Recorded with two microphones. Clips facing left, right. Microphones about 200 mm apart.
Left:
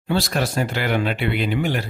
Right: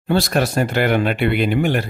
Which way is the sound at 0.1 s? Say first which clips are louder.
Right 4 dB; 55° right (ahead or behind).